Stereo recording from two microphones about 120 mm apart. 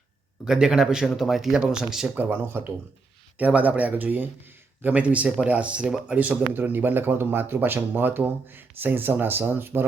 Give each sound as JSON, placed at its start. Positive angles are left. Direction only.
{"t": 0.4, "sound": "speech", "side_deg": -5}
{"t": 2.1, "sound": "speech", "side_deg": -15}